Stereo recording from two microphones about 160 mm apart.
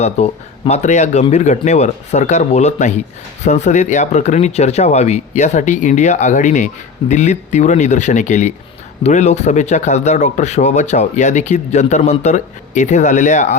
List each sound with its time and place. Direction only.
0.0 s speech: 40° left (ahead or behind)